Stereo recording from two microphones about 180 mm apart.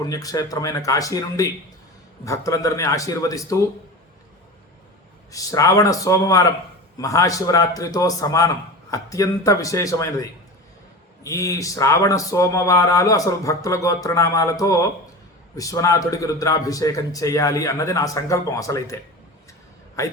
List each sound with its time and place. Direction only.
0.0 s a man's voice: 20° left (ahead or behind)
5.3 s a man's voice: 20° left (ahead or behind)
20.0 s speech: 15° left (ahead or behind)